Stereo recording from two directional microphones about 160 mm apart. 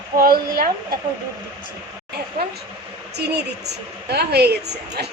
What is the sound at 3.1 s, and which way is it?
A woman's voice, 90° right.